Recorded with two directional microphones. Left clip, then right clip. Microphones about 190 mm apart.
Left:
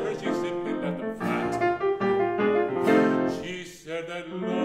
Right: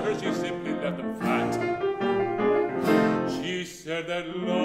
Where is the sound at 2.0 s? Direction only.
35° left (ahead or behind).